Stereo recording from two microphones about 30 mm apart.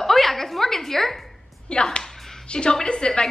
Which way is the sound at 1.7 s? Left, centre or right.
Left.